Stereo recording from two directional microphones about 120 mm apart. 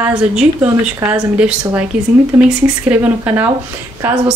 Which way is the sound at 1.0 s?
20° right (ahead or behind).